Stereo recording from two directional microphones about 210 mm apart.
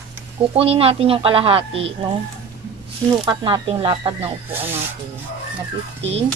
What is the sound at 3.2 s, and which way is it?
A woman's voice, 20° right (ahead or behind).